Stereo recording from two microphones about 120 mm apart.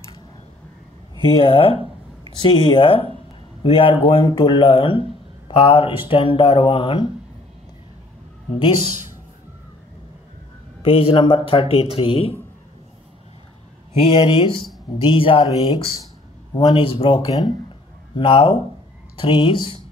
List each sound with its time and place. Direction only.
1.4 s speech: 50° left (ahead or behind)
4.2 s speech: 35° left (ahead or behind)
10.8 s speech: 50° left (ahead or behind)
14.1 s speech: 45° left (ahead or behind)